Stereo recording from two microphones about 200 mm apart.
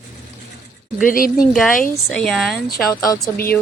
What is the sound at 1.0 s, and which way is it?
Speech, 45° left (ahead or behind).